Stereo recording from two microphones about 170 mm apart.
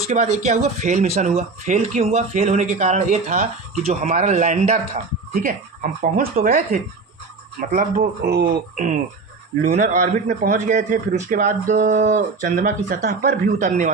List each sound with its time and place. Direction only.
0.1 s a man's voice: 45° right (ahead or behind)
8.2 s a man's voice: 65° right (ahead or behind); by 13.9 s 50° right (ahead or behind)